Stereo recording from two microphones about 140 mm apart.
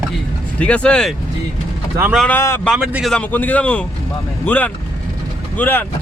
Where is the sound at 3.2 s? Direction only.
10° left (ahead or behind).